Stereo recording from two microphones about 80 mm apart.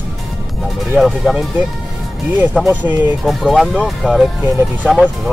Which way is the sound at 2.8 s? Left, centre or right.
Right.